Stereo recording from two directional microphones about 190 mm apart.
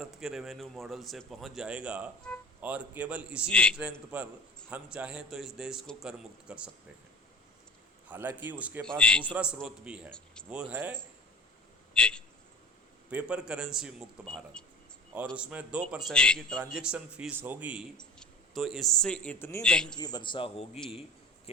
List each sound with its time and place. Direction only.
0.0 s a man's voice: centre (ahead or behind)
3.5 s a man's voice: 5° left (ahead or behind)
4.7 s a man's voice: 5° right (ahead or behind)
8.0 s a man's voice: 10° right (ahead or behind)
8.8 s a man's voice: 5° left (ahead or behind)
9.3 s a man's voice: 5° right (ahead or behind)
11.9 s a man's voice: 5° left (ahead or behind)
13.1 s a man's voice: 5° right (ahead or behind)
15.4 s a man's voice: 5° right (ahead or behind)
20.0 s a man's voice: 20° left (ahead or behind)